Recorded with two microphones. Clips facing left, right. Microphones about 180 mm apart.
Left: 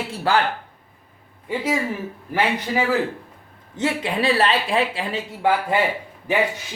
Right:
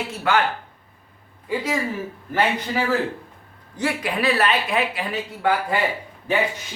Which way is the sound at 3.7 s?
25° left (ahead or behind).